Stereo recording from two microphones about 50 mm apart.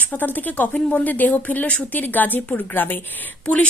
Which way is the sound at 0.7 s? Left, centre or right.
Left.